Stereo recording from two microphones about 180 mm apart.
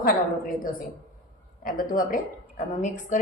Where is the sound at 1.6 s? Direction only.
50° left (ahead or behind).